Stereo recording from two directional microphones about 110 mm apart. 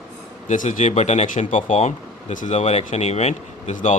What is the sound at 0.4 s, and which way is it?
Speech, 90° left.